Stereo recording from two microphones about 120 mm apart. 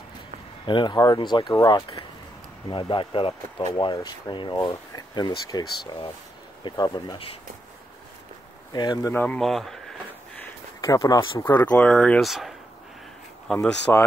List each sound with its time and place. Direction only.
0.7 s speech: 40° left (ahead or behind)
3.6 s speech: 35° left (ahead or behind)
8.7 s speech: 35° left (ahead or behind)
9.1 s speech: 10° left (ahead or behind)
10.8 s speech: 30° left (ahead or behind)
11.4 s speech: 15° left (ahead or behind)